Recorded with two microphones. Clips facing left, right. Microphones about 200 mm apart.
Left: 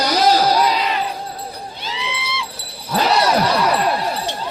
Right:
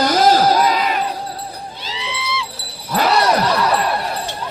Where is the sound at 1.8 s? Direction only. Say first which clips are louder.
Left 2 dB; 55° left (ahead or behind).